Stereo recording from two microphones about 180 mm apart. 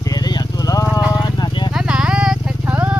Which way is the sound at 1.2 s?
25° left (ahead or behind).